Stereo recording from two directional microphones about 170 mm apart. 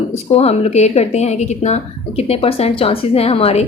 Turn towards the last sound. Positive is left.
turn(degrees=35)  # may be behind; listen again after turning